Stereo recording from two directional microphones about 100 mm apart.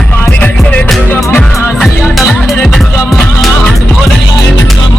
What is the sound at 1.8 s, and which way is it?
Music, centre (ahead or behind).